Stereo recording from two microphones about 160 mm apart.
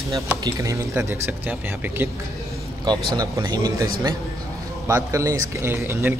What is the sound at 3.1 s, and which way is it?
Speech, 25° right (ahead or behind).